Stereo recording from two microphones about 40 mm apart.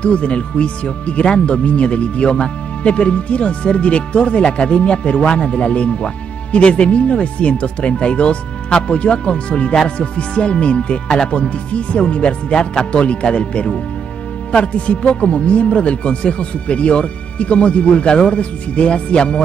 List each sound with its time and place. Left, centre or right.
0.0 s speech: left